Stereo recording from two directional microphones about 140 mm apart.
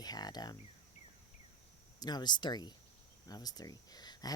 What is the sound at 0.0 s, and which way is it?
Speech, 30° left (ahead or behind).